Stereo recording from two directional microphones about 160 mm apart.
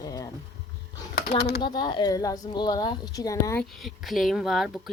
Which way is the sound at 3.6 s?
Centre (ahead or behind).